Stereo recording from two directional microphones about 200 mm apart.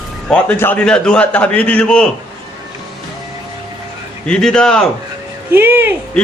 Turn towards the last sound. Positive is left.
turn(degrees=-10)  # may be behind; listen again after turning